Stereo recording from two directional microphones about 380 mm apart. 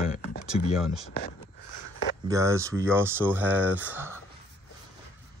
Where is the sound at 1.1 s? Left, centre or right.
Left.